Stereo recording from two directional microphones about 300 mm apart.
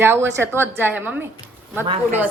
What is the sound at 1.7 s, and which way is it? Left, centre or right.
Speech, centre.